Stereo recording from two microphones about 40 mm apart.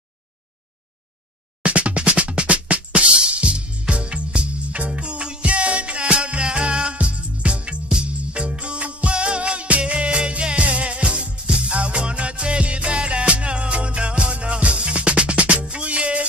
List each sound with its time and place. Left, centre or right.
1.6 s music: right